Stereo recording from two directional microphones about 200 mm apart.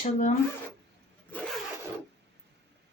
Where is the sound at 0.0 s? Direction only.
35° left (ahead or behind).